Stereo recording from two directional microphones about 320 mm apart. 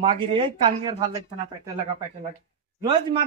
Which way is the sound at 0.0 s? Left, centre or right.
Centre.